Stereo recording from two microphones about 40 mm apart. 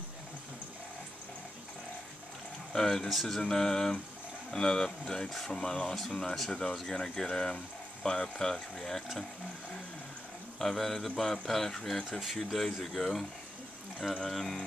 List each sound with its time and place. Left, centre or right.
2.7 s speech: centre
3.1 s speech: centre
3.3 s speech: centre
10.6 s speech: centre